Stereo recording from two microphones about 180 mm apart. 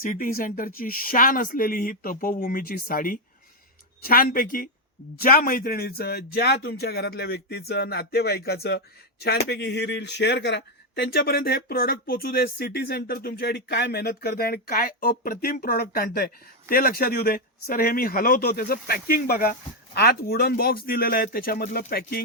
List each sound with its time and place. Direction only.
0.0 s speech: 50° left (ahead or behind)